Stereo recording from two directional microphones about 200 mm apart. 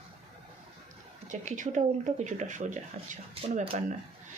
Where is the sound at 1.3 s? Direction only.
35° right (ahead or behind).